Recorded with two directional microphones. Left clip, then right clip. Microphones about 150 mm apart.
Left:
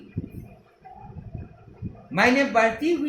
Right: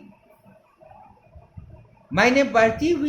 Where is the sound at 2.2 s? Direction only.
55° right (ahead or behind).